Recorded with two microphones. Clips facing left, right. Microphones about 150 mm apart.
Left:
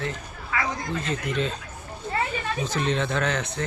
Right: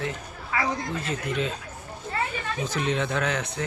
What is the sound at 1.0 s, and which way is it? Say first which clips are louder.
Speech: left 1 dB; 10° right (ahead or behind).